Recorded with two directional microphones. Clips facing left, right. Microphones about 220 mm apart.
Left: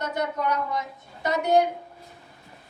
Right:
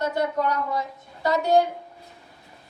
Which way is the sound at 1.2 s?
20° left (ahead or behind).